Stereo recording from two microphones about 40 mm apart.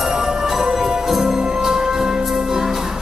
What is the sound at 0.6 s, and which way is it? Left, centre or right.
Music, centre.